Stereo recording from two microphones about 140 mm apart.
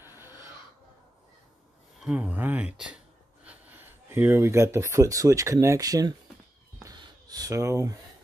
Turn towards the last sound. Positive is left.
turn(degrees=-20)  # may be behind; listen again after turning